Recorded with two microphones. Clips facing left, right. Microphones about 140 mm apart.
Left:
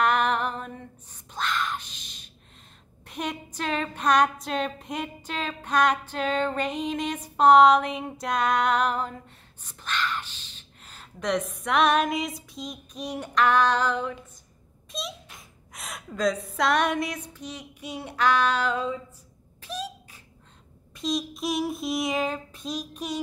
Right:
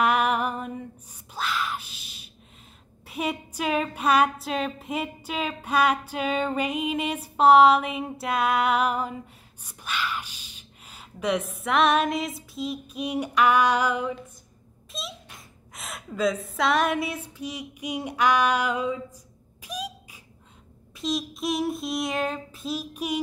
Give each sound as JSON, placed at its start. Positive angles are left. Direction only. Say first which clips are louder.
{"t": 0.0, "sound": "a sound", "louder": "right 1 dB", "side_deg": -10}
{"t": 14.9, "sound": "speech", "louder": "left 2 dB", "side_deg": 0}
{"t": 19.6, "sound": "cough", "louder": "even", "side_deg": -10}
{"t": 20.9, "sound": "child singing", "louder": "even", "side_deg": 0}